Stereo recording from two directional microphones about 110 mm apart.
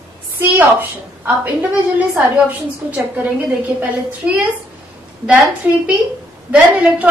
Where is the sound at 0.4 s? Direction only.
15° right (ahead or behind).